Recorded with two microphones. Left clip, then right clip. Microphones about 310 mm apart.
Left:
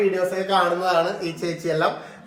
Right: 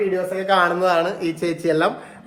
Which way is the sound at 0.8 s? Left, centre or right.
Right.